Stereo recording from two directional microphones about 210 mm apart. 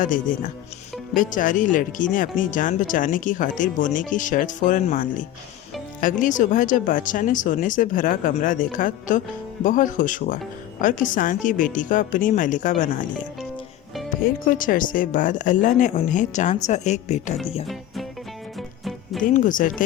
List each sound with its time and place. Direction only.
0.0 s speech: 40° left (ahead or behind)
14.3 s speech: 40° left (ahead or behind)
19.2 s speech: 40° left (ahead or behind)